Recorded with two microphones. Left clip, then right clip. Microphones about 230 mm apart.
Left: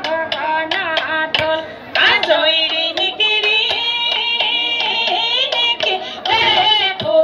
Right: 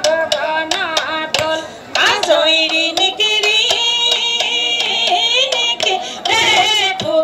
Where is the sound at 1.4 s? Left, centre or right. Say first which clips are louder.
Even; right.